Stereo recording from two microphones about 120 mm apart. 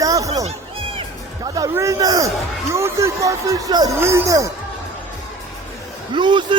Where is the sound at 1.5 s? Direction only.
30° right (ahead or behind).